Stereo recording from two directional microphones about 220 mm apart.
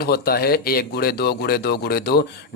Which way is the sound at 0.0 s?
45° left (ahead or behind).